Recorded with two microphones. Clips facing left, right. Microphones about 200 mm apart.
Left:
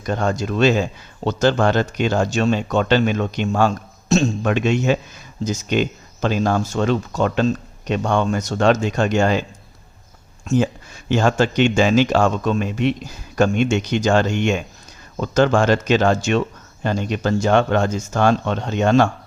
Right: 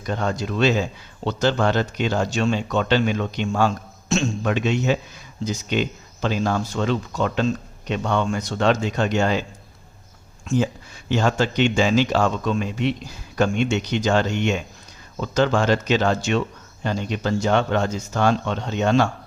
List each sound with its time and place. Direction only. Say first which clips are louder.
0.1 s speech: left 3 dB; 45° left (ahead or behind)
4.1 s a man's voice: left 5 dB; 40° left (ahead or behind)
4.4 s speech: left 3 dB; 50° left (ahead or behind)
11.1 s speech: left 3 dB; 50° left (ahead or behind)